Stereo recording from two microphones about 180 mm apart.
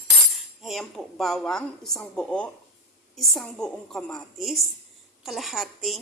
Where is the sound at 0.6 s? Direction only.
Centre (ahead or behind).